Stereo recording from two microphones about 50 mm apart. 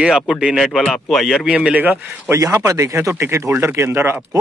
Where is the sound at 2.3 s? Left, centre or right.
Right.